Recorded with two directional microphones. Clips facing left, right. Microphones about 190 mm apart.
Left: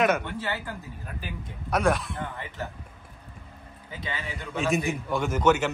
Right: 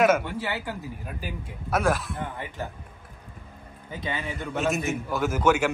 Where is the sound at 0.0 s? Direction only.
5° right (ahead or behind).